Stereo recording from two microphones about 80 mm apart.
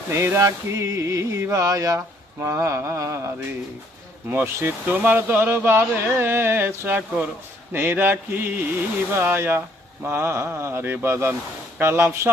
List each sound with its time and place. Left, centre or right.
0.1 s music: right
2.0 s music: right
4.3 s speech: right
10.1 s music: right